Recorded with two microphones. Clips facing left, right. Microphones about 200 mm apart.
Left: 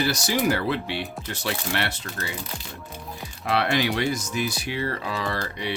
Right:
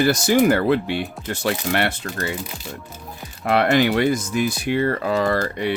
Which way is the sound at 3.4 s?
50° right (ahead or behind).